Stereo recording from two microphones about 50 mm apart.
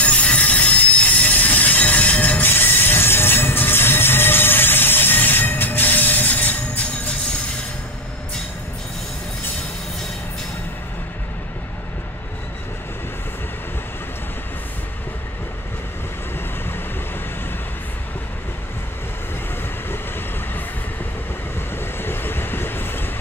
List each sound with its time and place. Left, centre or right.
0.0 s train: left
21.5 s vehicle: left